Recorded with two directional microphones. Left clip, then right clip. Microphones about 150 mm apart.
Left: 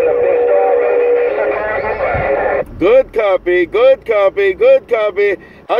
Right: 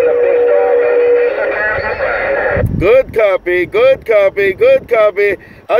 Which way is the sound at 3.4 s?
10° right (ahead or behind).